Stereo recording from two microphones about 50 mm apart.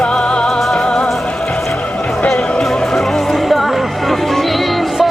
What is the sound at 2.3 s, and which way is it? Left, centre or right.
Music, left.